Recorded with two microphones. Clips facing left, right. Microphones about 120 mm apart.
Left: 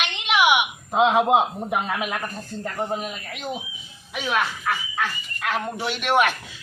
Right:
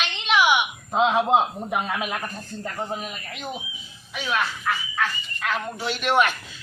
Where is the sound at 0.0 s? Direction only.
15° left (ahead or behind).